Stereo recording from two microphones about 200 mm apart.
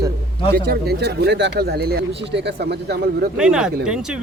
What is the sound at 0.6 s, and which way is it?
Speech, 55° right (ahead or behind).